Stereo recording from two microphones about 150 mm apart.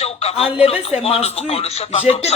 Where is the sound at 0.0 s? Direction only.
40° left (ahead or behind).